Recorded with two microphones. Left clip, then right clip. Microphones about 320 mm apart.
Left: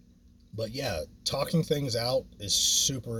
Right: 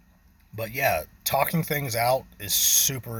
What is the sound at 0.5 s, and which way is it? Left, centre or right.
A man's voice, centre.